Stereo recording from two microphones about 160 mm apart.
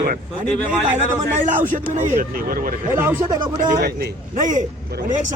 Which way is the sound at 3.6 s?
65° right (ahead or behind).